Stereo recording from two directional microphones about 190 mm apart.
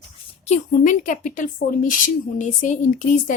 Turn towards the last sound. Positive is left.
turn(degrees=45)  # may be behind; listen again after turning